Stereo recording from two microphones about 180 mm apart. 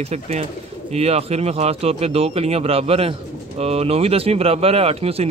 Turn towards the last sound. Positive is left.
turn(degrees=-35)  # may be behind; listen again after turning